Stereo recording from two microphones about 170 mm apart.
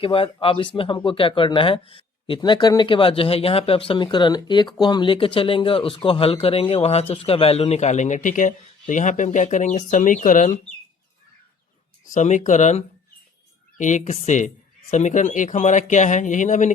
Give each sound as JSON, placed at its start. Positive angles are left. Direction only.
{"t": 0.0, "sound": "a man's voice", "side_deg": 30}
{"t": 12.0, "sound": "a man's voice", "side_deg": 45}